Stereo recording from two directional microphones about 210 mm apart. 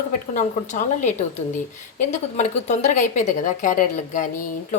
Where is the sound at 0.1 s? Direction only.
35° left (ahead or behind).